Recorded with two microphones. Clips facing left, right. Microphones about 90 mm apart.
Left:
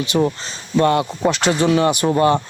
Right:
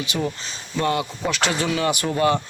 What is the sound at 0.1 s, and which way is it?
Speech, 40° left (ahead or behind).